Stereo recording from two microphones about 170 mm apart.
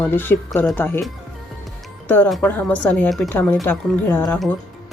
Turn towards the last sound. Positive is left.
turn(degrees=10)  # may be behind; listen again after turning